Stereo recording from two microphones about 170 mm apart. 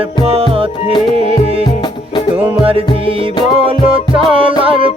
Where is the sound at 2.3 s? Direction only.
35° right (ahead or behind).